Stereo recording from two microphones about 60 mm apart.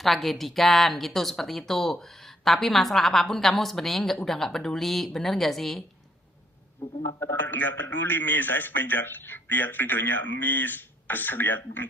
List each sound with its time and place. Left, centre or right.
0.0 s speech: centre
6.8 s a man's voice: left